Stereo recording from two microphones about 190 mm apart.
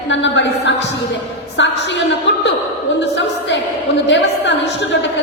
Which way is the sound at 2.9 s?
70° left (ahead or behind).